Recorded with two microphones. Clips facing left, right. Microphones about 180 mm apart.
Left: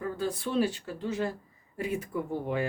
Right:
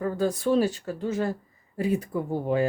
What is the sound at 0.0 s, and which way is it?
Speech, 45° right (ahead or behind).